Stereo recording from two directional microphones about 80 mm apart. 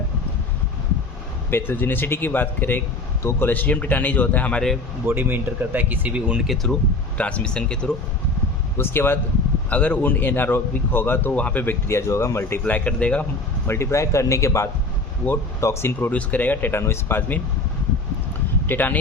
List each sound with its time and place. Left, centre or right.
1.5 s speech: left
5.0 s speech: right
6.5 s speech: centre
7.2 s speech: centre
8.8 s speech: left
9.6 s speech: centre
13.7 s a man's voice: left
16.1 s speech: left
18.6 s speech: left